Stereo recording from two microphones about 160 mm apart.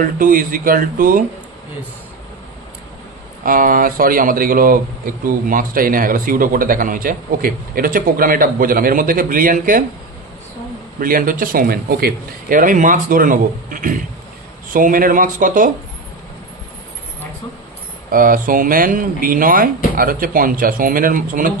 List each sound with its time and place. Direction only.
0.0 s a man's voice: 60° right (ahead or behind)
3.4 s a man's voice: 60° right (ahead or behind)
11.0 s a man's voice: 60° right (ahead or behind)
18.1 s a man's voice: 60° right (ahead or behind)